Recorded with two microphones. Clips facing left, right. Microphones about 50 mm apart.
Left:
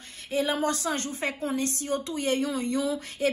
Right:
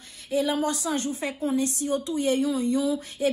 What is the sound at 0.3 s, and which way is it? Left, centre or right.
A woman's voice, left.